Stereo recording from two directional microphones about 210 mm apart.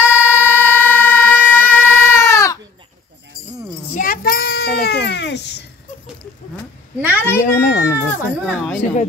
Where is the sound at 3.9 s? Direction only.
45° left (ahead or behind).